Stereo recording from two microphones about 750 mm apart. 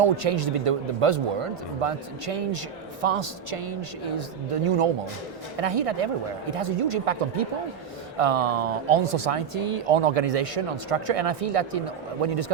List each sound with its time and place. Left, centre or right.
0.0 s speech: right